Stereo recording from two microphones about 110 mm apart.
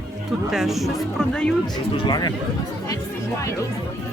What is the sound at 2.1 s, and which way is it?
Speech, 40° left (ahead or behind).